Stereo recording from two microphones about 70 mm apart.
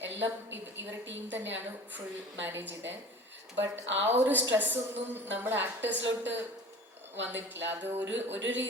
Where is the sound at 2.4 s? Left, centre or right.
Right.